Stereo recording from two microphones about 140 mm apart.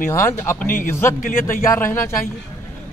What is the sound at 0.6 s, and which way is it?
A man's voice, 80° left.